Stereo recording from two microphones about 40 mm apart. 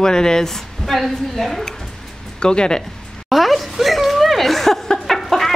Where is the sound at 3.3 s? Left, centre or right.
Centre.